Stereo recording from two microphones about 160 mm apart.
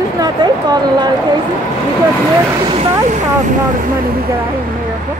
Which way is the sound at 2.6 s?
35° right (ahead or behind).